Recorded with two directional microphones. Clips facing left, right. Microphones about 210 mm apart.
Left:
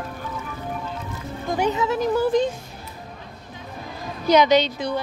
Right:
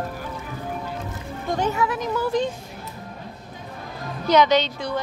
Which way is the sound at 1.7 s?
25° left (ahead or behind).